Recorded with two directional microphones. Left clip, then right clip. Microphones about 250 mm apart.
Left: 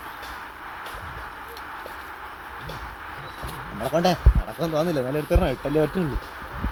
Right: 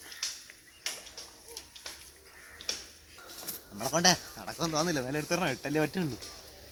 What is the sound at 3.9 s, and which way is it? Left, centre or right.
Speech, right.